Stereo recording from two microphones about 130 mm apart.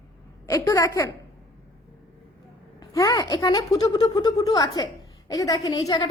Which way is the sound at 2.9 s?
25° left (ahead or behind).